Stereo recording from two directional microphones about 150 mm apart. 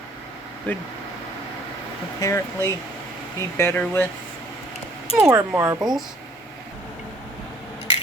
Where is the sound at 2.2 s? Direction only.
25° left (ahead or behind).